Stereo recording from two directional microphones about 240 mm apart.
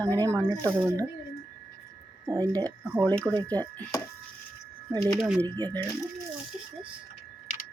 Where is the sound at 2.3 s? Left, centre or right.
Centre.